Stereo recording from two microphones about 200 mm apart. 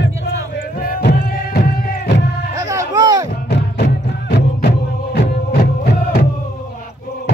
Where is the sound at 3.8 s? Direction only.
55° left (ahead or behind).